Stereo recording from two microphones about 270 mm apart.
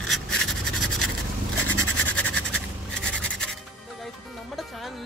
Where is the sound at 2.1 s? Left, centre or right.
Centre.